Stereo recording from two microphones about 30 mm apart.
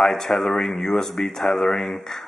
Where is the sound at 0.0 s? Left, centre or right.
Centre.